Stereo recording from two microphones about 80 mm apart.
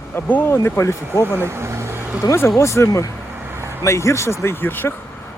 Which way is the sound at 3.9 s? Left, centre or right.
Left.